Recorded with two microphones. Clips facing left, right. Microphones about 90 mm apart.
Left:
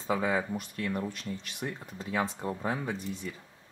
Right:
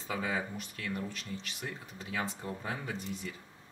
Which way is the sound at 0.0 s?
45° left (ahead or behind).